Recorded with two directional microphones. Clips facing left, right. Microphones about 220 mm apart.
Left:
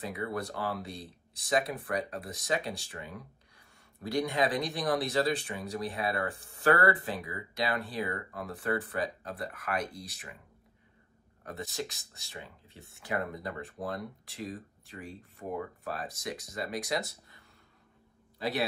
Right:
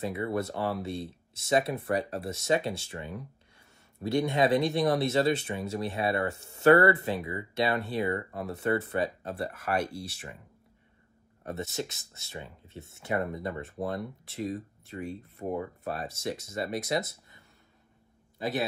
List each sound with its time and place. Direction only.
0.0 s speech: 25° right (ahead or behind)
11.4 s speech: 25° right (ahead or behind)